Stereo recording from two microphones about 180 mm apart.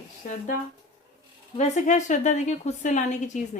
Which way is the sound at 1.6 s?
40° left (ahead or behind).